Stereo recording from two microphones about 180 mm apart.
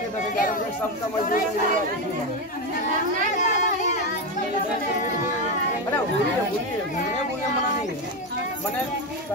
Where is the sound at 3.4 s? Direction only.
45° left (ahead or behind).